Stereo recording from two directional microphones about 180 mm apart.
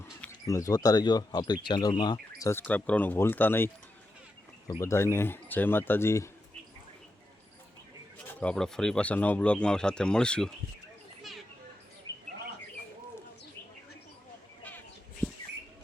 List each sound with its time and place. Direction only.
0.0 s speech: 15° left (ahead or behind)
4.7 s speech: 15° left (ahead or behind)
8.3 s speech: 5° left (ahead or behind)
12.1 s bird: 15° left (ahead or behind)